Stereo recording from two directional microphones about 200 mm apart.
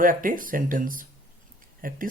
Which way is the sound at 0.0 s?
45° right (ahead or behind).